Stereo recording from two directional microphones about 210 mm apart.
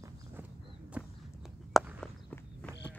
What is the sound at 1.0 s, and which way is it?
Walk, 5° right (ahead or behind).